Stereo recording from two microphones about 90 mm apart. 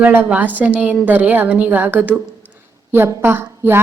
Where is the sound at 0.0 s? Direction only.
20° right (ahead or behind).